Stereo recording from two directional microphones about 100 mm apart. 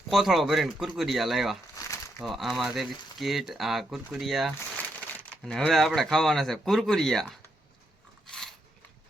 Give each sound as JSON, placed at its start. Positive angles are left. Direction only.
{"t": 0.1, "sound": "speech", "side_deg": 0}
{"t": 4.6, "sound": "speech", "side_deg": 15}
{"t": 8.3, "sound": "biting", "side_deg": 5}